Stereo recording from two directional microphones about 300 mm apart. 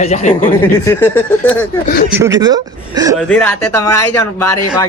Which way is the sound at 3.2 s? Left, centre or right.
Centre.